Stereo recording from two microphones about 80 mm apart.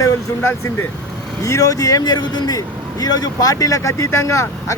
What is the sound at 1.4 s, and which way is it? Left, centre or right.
Speech, left.